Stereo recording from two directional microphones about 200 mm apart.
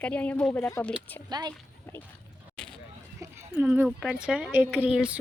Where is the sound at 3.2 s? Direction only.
10° right (ahead or behind).